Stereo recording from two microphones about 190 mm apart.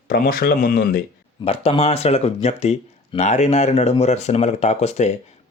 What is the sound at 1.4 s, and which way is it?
Speech, 30° left (ahead or behind).